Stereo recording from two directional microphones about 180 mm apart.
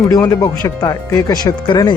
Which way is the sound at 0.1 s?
20° left (ahead or behind).